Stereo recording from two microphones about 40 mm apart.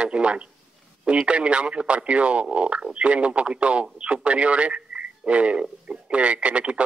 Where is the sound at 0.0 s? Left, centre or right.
Right.